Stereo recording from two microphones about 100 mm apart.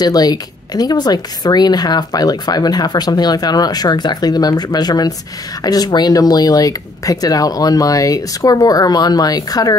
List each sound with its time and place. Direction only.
0.0 s a woman's voice: 40° left (ahead or behind)